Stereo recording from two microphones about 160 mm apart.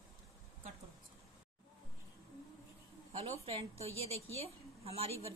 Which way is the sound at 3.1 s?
40° right (ahead or behind).